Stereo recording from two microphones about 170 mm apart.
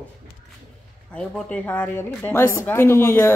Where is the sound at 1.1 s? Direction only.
10° left (ahead or behind).